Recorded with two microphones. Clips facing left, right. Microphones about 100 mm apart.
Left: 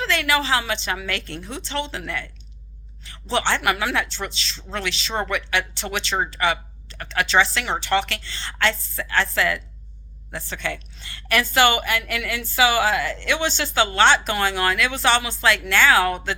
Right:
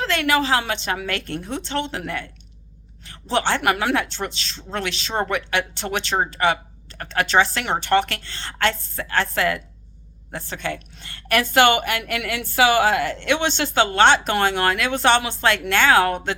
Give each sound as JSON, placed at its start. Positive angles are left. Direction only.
{"t": 0.0, "sound": "speech", "side_deg": -45}